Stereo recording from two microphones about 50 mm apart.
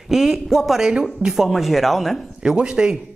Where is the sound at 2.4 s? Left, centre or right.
Centre.